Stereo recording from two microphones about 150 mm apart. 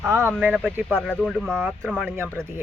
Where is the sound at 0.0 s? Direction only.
15° right (ahead or behind).